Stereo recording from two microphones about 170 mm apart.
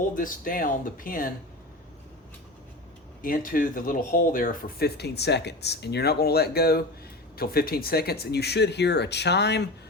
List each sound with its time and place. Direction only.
0.2 s speech: 55° left (ahead or behind)
3.2 s speech: 55° left (ahead or behind); by 9.6 s 85° left